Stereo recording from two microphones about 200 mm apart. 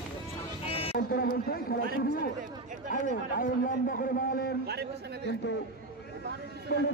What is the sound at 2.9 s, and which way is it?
A man's voice, 40° left (ahead or behind).